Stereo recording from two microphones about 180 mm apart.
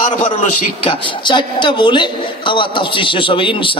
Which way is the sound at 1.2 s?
25° left (ahead or behind).